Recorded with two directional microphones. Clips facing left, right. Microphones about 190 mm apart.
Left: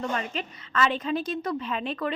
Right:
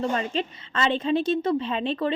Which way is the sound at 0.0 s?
30° right (ahead or behind).